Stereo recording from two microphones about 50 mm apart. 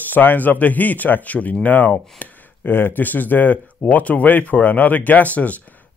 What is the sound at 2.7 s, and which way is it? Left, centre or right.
Speech, left.